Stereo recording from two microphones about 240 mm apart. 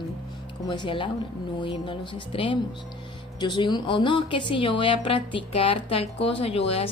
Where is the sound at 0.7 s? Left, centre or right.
Left.